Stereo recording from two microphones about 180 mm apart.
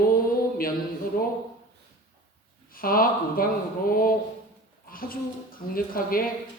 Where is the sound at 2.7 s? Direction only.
55° left (ahead or behind).